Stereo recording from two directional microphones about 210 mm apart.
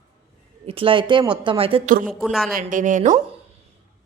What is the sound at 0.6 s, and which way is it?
Speech, 25° right (ahead or behind).